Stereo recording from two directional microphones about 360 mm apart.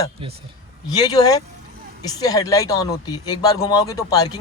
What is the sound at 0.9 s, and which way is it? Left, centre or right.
Speech, centre.